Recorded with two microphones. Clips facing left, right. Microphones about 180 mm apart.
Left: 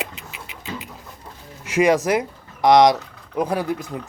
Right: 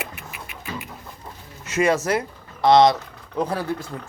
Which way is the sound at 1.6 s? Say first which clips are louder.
Left 3 dB; 15° left (ahead or behind).